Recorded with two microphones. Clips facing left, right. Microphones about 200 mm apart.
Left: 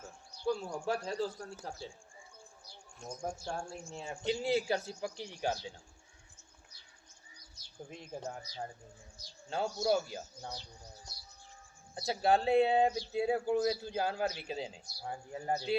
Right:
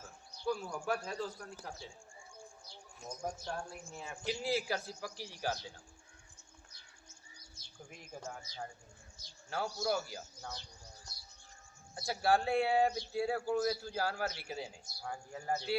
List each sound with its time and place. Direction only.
0.4 s bird: 25° left (ahead or behind)
0.9 s a man's voice: 25° left (ahead or behind)
3.4 s a man's voice: 25° left (ahead or behind)
7.9 s a man's voice: 30° left (ahead or behind)
9.5 s a man's voice: 25° left (ahead or behind)
11.9 s a man's voice: 20° left (ahead or behind)